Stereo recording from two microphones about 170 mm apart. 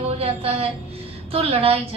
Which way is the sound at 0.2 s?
35° right (ahead or behind).